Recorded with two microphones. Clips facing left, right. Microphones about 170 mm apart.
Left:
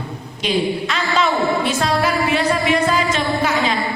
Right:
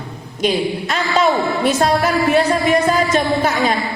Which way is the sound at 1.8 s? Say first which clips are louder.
Right 3 dB; 45° right (ahead or behind).